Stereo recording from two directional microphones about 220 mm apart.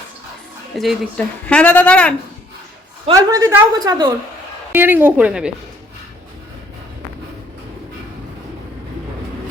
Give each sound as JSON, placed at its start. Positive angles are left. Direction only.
{"t": 0.7, "sound": "speech", "side_deg": 0}
{"t": 3.1, "sound": "a woman's voice", "side_deg": -15}